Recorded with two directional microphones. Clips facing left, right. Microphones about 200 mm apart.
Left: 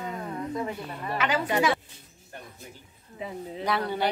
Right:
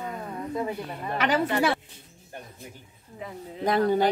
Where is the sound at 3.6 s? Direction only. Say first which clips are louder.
Right 6 dB; 45° right (ahead or behind).